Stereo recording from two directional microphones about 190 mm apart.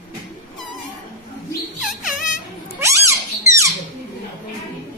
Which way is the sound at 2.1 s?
45° left (ahead or behind).